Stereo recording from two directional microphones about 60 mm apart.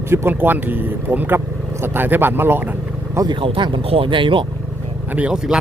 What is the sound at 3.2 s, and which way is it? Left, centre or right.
Speech, right.